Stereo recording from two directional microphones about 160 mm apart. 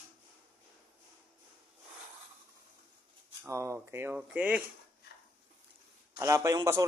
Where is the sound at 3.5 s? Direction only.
20° right (ahead or behind).